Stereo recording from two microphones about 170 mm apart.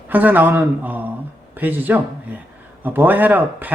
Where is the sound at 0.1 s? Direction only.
10° right (ahead or behind).